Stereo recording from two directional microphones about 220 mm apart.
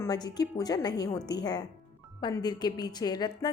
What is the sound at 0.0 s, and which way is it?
A woman's voice, 15° left (ahead or behind).